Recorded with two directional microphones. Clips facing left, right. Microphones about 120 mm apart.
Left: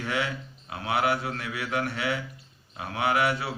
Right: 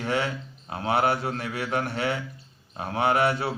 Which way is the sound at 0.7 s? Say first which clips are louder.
Right 2 dB; 35° right (ahead or behind).